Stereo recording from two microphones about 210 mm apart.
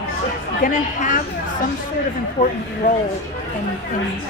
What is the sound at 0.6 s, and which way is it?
Speech, 40° left (ahead or behind).